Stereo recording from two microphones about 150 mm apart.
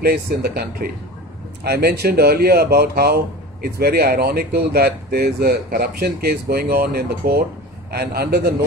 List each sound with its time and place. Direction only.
0.0 s speech: 90° right